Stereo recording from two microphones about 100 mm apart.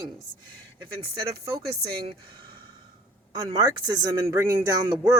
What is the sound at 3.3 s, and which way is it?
Speech, 40° right (ahead or behind).